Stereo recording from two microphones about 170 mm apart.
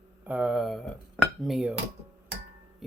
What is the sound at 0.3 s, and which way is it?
Female singing, 5° right (ahead or behind).